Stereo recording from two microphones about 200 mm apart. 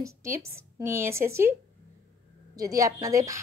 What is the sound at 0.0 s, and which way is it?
A woman's voice, 15° right (ahead or behind).